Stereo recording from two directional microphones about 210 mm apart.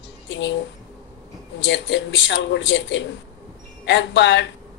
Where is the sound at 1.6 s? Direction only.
60° left (ahead or behind).